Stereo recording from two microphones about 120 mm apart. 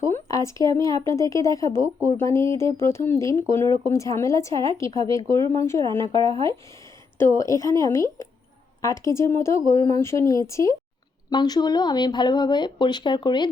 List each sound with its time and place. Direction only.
0.0 s speech: 25° left (ahead or behind)
7.2 s speech: 25° left (ahead or behind)